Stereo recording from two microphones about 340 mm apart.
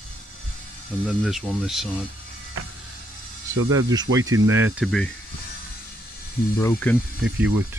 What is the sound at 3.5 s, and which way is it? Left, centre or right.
Speech, right.